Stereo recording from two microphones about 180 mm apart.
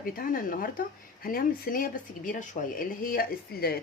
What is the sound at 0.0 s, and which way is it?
Speech, 50° left (ahead or behind).